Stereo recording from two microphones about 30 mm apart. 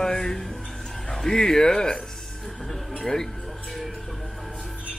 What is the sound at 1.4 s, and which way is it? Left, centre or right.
Speech, left.